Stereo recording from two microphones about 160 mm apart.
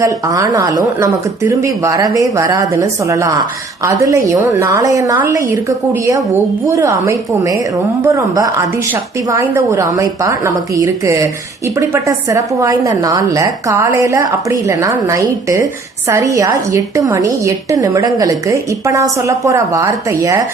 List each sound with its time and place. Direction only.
0.0 s a woman's voice: 20° right (ahead or behind)